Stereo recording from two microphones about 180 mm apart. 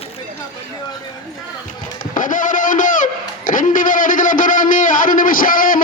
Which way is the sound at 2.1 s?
45° left (ahead or behind).